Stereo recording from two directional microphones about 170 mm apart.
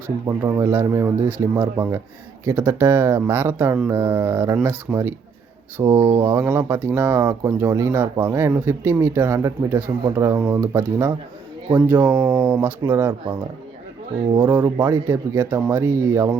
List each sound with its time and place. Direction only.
0.3 s speech: 15° right (ahead or behind)
14.4 s speech: 10° right (ahead or behind)